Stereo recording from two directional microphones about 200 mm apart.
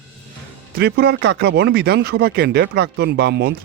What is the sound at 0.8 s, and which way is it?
Speech, 55° right (ahead or behind).